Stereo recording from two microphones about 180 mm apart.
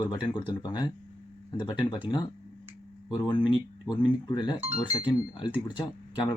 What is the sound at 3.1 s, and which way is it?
Speech, 25° left (ahead or behind).